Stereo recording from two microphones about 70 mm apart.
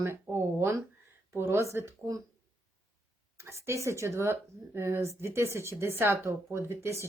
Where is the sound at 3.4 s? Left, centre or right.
Right.